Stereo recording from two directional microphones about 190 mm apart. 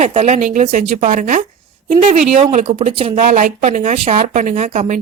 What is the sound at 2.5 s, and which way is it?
Speech, 40° right (ahead or behind).